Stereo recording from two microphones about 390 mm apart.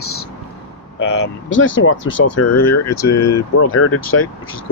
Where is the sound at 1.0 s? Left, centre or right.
Left.